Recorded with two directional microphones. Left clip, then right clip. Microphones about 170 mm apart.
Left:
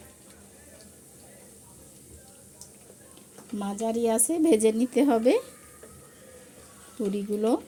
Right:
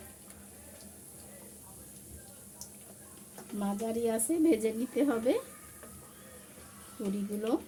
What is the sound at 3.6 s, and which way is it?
Speech, 50° left (ahead or behind).